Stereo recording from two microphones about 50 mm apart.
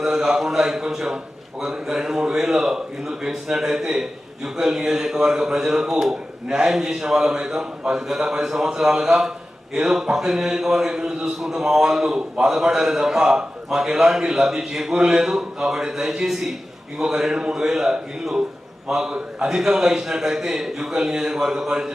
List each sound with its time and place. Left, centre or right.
0.0 s a man's voice: centre